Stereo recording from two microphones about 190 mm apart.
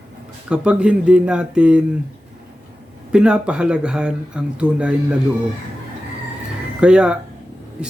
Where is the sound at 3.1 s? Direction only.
5° right (ahead or behind).